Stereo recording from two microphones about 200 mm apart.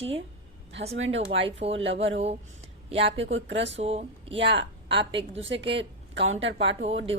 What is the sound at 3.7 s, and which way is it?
Speech, 30° right (ahead or behind).